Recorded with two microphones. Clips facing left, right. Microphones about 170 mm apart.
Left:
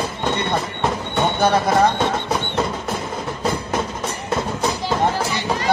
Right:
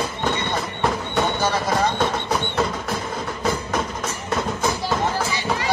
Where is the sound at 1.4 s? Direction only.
60° left (ahead or behind).